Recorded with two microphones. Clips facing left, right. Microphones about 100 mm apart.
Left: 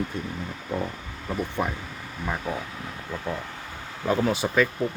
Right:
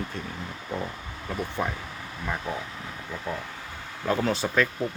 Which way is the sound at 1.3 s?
10° left (ahead or behind).